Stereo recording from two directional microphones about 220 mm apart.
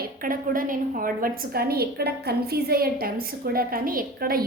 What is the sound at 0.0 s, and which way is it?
A woman's voice, 40° right (ahead or behind).